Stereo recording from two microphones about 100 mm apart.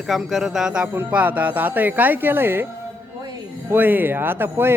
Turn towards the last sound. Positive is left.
turn(degrees=-20)  # may be behind; listen again after turning